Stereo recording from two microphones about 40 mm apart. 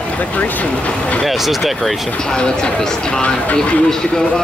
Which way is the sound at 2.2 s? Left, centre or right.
Centre.